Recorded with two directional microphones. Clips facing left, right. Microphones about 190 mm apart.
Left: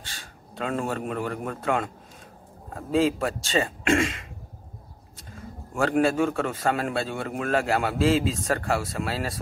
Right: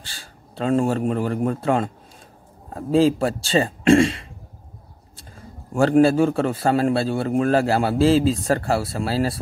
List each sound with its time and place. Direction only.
0.0 s a man's voice: 30° right (ahead or behind)